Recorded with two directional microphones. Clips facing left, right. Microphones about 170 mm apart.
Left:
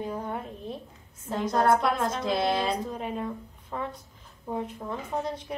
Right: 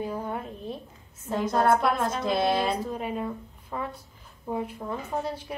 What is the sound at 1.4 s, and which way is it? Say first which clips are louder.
Speech: even; 55° right (ahead or behind).